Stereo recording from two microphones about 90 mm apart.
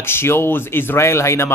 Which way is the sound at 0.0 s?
25° left (ahead or behind).